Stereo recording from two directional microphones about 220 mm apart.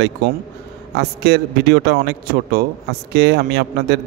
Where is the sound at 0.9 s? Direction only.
45° right (ahead or behind).